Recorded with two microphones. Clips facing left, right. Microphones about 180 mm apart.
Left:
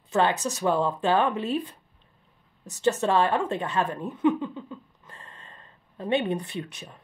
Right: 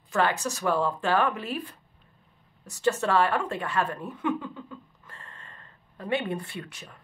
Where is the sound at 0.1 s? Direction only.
20° left (ahead or behind).